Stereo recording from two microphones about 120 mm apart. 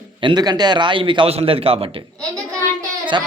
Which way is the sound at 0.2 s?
40° right (ahead or behind).